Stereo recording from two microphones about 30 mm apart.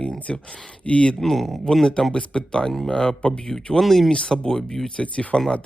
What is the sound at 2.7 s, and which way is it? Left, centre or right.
Speech, centre.